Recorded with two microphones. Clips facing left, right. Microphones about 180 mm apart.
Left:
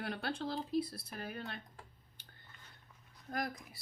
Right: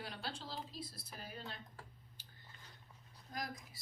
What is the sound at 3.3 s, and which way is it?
Speech, 60° left (ahead or behind).